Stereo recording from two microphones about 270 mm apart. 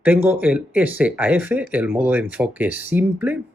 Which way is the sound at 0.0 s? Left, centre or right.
Centre.